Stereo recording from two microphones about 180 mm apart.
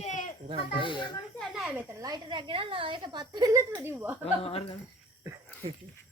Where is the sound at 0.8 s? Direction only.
25° left (ahead or behind).